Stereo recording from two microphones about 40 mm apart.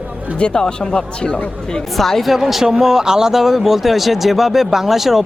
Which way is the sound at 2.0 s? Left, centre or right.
Centre.